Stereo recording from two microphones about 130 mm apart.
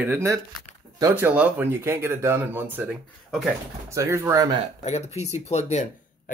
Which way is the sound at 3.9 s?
20° right (ahead or behind).